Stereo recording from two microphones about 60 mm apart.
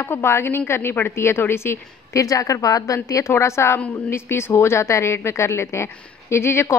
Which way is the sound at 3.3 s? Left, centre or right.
Left.